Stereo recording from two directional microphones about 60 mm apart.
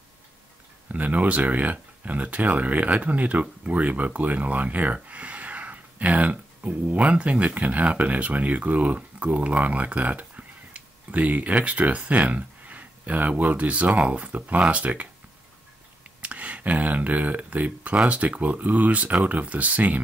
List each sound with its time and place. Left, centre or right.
0.9 s speech: right
16.2 s speech: right